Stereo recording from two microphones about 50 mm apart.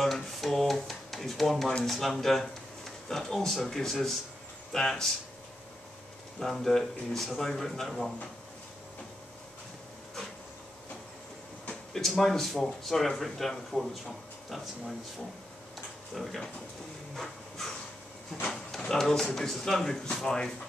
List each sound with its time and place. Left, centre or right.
0.0 s a sound: centre
1.9 s speech: centre
6.4 s speech: centre
11.9 s speech: centre
16.2 s speech: centre
17.1 s a sound: centre
18.5 s speech: centre